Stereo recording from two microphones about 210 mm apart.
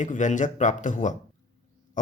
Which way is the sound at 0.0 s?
35° left (ahead or behind).